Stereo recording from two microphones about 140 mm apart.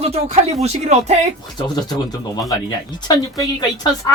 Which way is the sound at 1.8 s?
30° left (ahead or behind).